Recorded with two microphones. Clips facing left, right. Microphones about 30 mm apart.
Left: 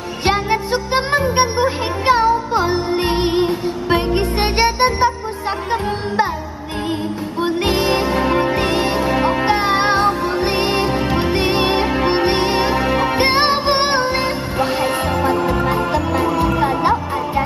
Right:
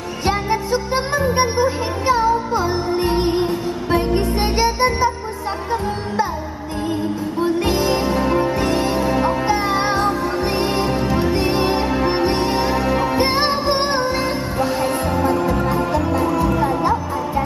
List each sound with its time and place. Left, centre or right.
0.3 s music: left
7.4 s music: left